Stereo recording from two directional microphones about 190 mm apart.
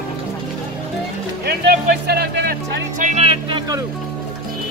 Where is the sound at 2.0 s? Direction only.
60° right (ahead or behind).